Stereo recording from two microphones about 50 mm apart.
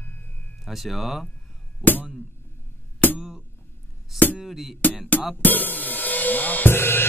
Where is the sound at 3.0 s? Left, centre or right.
Left.